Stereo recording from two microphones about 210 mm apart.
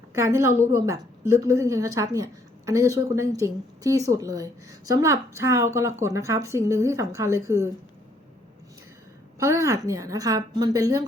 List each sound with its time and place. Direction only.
0.2 s a woman's voice: 15° right (ahead or behind)
9.4 s a woman's voice: 15° right (ahead or behind)